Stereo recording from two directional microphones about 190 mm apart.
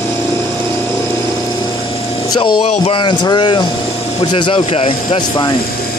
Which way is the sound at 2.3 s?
25° left (ahead or behind).